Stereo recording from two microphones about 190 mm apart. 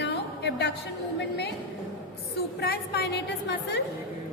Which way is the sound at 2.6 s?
60° left (ahead or behind).